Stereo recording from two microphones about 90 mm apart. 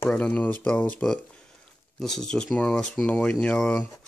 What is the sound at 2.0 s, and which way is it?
Speech, 5° left (ahead or behind).